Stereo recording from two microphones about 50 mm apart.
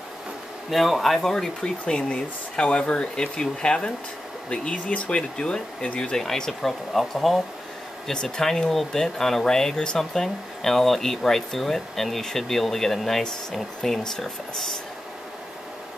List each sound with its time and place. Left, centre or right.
0.7 s speech: centre
1.6 s speech: centre